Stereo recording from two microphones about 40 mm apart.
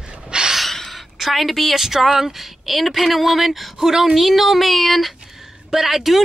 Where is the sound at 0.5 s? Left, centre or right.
Centre.